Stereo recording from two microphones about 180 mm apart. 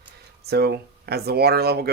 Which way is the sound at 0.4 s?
60° right (ahead or behind).